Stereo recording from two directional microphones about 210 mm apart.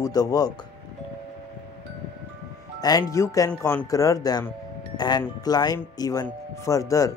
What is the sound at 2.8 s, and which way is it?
Speech, 15° left (ahead or behind).